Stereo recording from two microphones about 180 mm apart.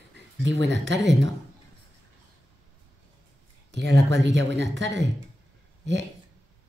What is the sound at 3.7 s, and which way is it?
Speech, 75° right (ahead or behind).